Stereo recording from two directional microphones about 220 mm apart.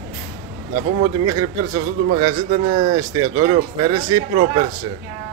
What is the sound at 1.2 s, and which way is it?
A man's voice, 15° right (ahead or behind).